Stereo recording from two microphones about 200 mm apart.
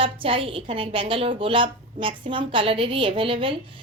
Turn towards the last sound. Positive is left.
turn(degrees=-25)  # may be behind; listen again after turning